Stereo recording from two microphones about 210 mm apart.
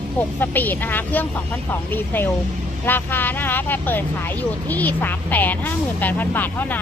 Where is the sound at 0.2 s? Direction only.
10° left (ahead or behind).